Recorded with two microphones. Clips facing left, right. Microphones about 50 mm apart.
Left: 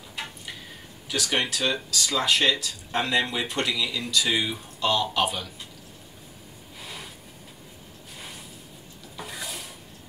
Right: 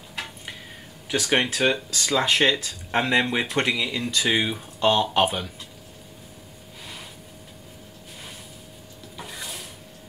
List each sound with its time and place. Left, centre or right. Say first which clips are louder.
1.0 s speech: right 4 dB; right
9.1 s dishes: left 1 dB; centre